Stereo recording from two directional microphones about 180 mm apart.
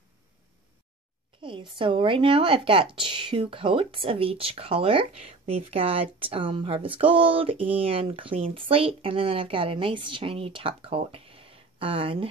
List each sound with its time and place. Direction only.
1.4 s speech: 30° right (ahead or behind)